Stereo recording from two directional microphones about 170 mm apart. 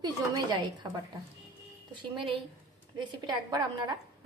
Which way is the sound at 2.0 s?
30° right (ahead or behind).